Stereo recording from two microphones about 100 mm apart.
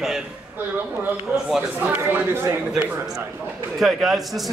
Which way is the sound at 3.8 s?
Centre (ahead or behind).